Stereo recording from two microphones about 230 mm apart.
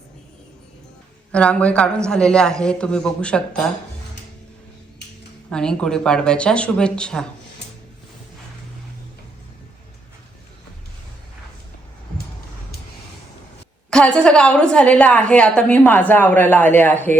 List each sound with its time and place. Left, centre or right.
1.3 s a woman's voice: centre
5.5 s a woman's voice: centre
13.9 s a woman's voice: centre